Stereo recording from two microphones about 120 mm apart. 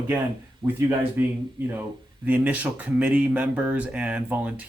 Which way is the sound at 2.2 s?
15° right (ahead or behind).